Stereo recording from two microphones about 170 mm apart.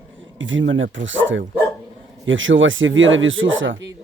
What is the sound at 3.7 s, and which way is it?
Speech, 90° right.